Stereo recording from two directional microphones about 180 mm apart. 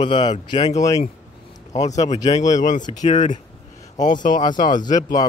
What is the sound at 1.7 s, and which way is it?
Speech, 40° left (ahead or behind).